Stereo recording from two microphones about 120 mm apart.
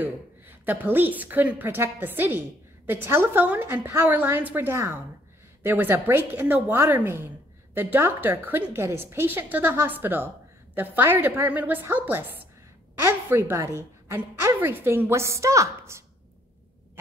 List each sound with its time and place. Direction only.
0.0 s a woman's voice: 15° right (ahead or behind)